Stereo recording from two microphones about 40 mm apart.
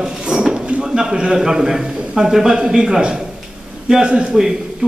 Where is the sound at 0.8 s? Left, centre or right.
Centre.